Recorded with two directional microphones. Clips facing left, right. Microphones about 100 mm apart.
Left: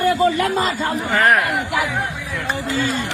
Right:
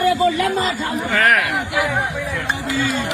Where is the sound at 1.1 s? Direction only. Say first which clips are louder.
Left 1 dB; 20° left (ahead or behind).